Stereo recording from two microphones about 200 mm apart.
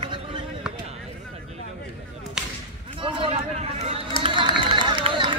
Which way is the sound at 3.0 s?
30° right (ahead or behind).